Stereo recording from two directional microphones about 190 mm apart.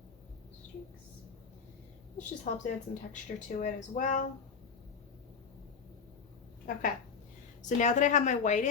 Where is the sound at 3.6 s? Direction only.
40° left (ahead or behind).